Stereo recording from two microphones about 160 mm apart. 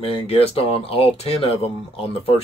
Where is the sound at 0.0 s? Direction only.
40° left (ahead or behind).